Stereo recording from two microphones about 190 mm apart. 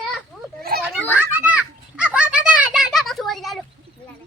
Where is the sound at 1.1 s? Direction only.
5° right (ahead or behind).